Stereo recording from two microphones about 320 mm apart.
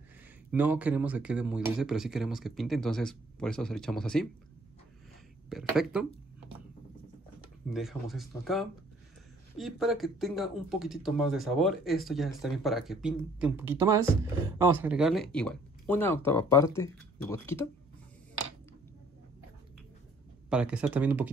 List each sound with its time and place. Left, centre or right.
0.5 s speech: centre
5.5 s speech: centre
7.7 s speech: centre
20.4 s speech: centre